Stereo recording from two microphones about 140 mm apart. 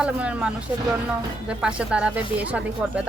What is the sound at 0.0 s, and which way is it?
Speech, 10° right (ahead or behind).